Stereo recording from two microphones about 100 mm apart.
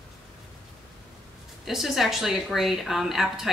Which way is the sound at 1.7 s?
5° right (ahead or behind).